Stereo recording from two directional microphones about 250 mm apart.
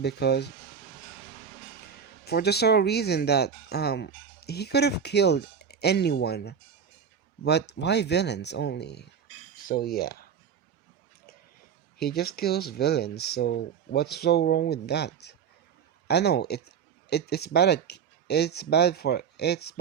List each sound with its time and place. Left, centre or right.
0.0 s speech: left
2.2 s speech: left
11.9 s speech: left